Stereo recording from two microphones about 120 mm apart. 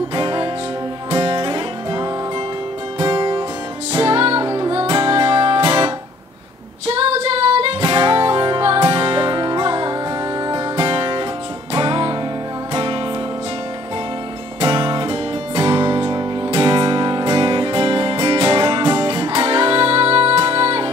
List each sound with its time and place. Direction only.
0.1 s music: 45° right (ahead or behind)
6.9 s music: 60° right (ahead or behind)
14.6 s music: 45° right (ahead or behind)